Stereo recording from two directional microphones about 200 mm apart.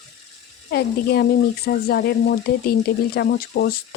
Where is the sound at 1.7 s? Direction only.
55° left (ahead or behind).